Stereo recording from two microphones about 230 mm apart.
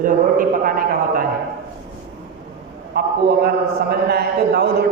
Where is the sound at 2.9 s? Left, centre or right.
Right.